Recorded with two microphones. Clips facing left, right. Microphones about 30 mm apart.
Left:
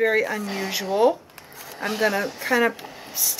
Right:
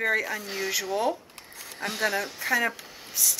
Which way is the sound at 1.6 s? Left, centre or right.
Centre.